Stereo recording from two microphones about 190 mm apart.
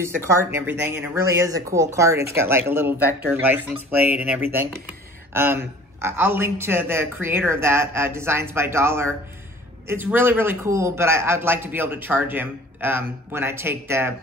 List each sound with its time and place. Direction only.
0.0 s speech: 15° right (ahead or behind)